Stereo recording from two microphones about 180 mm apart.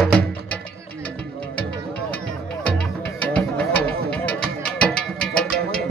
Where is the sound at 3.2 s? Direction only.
5° left (ahead or behind).